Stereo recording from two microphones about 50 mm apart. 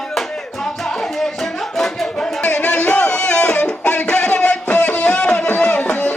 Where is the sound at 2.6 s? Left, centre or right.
Left.